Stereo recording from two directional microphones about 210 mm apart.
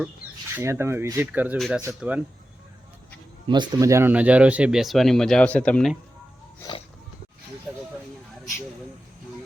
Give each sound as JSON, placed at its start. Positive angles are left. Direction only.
{"t": 0.5, "sound": "speech", "side_deg": -10}
{"t": 3.4, "sound": "speech", "side_deg": -20}
{"t": 6.6, "sound": "speech", "side_deg": 20}
{"t": 7.7, "sound": "a sound", "side_deg": 0}